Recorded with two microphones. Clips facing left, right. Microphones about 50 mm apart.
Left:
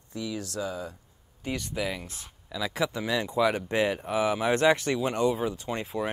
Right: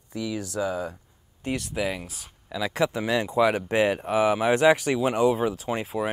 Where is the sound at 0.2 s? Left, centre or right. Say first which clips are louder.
Right 4 dB; centre.